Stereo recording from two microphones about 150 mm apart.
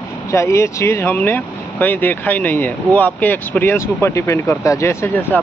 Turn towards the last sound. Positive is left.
turn(degrees=15)  # may be behind; listen again after turning